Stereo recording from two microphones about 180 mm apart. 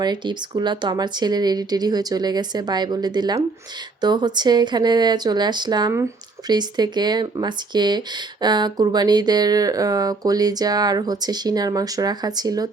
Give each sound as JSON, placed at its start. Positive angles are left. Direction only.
{"t": 0.0, "sound": "speech", "side_deg": -25}